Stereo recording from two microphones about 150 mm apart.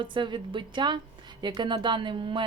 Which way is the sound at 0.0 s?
30° right (ahead or behind).